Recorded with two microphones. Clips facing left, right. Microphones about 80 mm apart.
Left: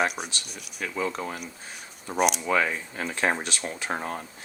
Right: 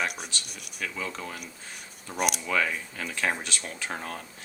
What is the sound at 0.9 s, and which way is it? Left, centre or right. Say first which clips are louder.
Speech: left 9 dB; left.